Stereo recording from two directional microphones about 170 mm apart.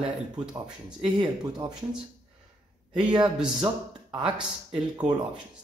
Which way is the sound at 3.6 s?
30° right (ahead or behind).